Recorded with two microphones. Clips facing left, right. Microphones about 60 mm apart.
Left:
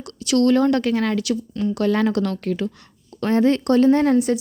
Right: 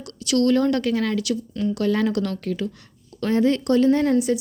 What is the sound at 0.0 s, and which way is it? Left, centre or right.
A woman's voice, left.